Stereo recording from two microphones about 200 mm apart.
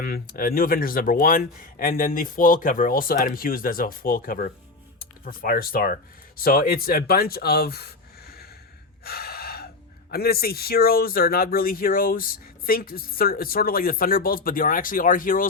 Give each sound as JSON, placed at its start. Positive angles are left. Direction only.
{"t": 0.0, "sound": "speech", "side_deg": 45}
{"t": 9.0, "sound": "gasp", "side_deg": 50}
{"t": 10.1, "sound": "speech", "side_deg": 50}